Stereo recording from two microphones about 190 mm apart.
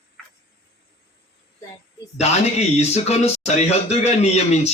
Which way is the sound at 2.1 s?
35° left (ahead or behind).